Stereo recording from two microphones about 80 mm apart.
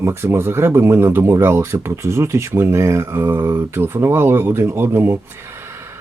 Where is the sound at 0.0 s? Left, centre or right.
Right.